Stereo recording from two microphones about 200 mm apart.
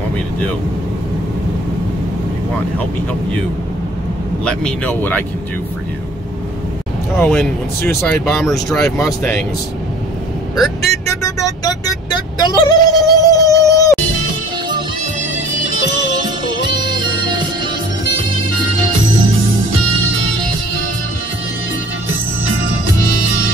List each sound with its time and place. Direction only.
4.5 s speech: 5° left (ahead or behind)
7.2 s speech: 5° left (ahead or behind)
8.9 s speech: 15° left (ahead or behind)
11.1 s vehicle: 15° left (ahead or behind)
12.4 s a sound: 20° left (ahead or behind)